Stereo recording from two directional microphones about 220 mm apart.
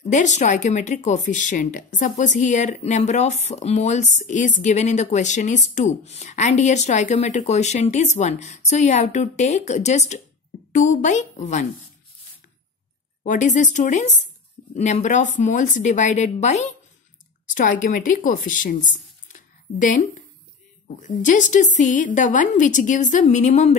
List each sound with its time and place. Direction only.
0.0 s speech: 35° left (ahead or behind)
13.2 s speech: 35° left (ahead or behind)
19.2 s a sound: 35° left (ahead or behind)
21.1 s speech: 35° left (ahead or behind)